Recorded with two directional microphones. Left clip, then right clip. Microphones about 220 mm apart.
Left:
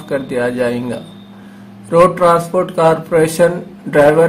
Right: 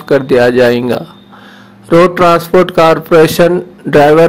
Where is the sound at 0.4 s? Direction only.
45° right (ahead or behind).